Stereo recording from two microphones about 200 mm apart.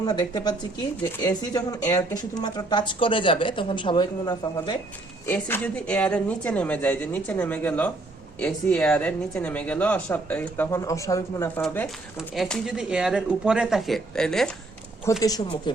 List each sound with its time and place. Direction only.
0.0 s speech: 20° left (ahead or behind)
5.2 s speech: 10° left (ahead or behind)
15.1 s speech: 15° left (ahead or behind)